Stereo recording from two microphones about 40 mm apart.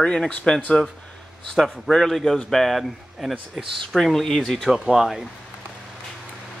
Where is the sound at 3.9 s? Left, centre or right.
Centre.